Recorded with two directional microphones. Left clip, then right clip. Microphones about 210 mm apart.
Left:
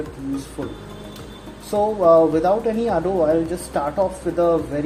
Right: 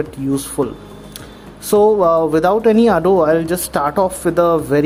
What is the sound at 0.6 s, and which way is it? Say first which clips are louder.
Speech: right 10 dB; 50° right (ahead or behind).